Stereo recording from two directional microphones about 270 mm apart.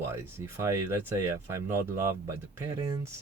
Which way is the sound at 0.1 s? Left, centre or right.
Centre.